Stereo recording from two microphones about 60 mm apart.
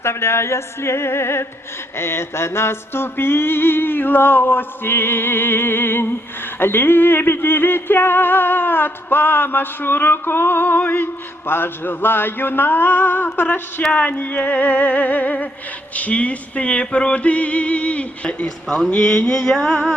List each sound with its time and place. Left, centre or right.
0.0 s a sound: left
2.0 s music: left
13.9 s male singing: left
18.9 s mantra: centre